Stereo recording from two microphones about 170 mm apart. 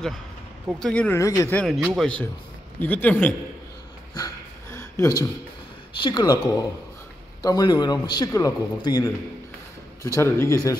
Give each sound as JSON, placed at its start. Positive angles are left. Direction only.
{"t": 0.7, "sound": "speech", "side_deg": 5}
{"t": 1.6, "sound": "a man's voice", "side_deg": 5}
{"t": 4.7, "sound": "a sound", "side_deg": 15}
{"t": 6.0, "sound": "speech", "side_deg": 25}
{"t": 7.4, "sound": "speech", "side_deg": 25}